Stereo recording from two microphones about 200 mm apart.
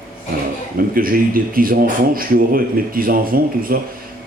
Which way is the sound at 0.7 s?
45° right (ahead or behind).